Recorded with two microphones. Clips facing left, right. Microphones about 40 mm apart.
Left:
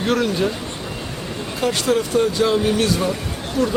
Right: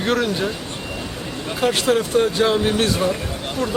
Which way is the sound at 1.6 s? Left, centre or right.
Centre.